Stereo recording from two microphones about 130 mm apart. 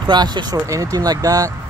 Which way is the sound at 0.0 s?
35° right (ahead or behind).